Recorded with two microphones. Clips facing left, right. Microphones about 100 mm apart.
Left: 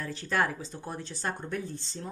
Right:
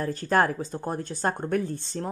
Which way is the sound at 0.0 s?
45° right (ahead or behind).